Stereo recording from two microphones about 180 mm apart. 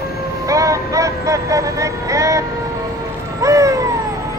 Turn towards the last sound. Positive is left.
turn(degrees=-15)  # may be behind; listen again after turning